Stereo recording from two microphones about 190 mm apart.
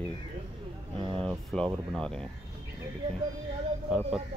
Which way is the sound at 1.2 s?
5° left (ahead or behind).